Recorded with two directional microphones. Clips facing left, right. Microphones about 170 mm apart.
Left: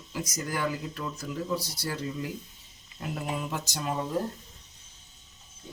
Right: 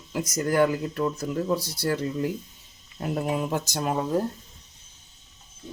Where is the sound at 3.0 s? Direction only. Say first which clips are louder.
Right 7 dB; 45° right (ahead or behind).